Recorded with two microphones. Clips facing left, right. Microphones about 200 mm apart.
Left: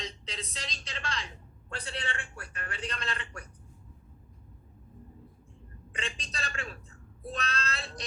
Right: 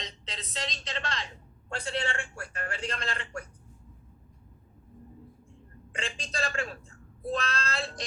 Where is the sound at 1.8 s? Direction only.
30° right (ahead or behind).